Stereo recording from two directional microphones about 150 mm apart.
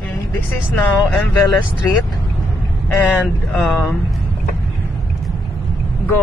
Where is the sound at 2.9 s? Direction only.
10° left (ahead or behind).